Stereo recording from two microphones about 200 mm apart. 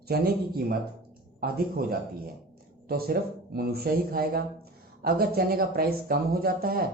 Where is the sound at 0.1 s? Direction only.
50° right (ahead or behind).